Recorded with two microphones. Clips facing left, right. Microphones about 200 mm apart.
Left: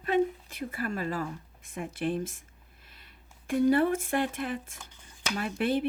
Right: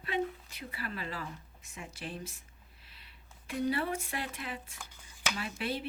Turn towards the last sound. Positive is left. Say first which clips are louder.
# left 8 dB
turn(degrees=55)  # may be behind; listen again after turning